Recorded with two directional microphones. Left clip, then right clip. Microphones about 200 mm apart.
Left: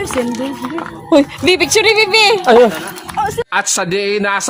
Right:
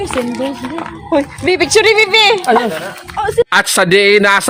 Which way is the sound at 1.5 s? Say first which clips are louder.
Right 4 dB; 10° right (ahead or behind).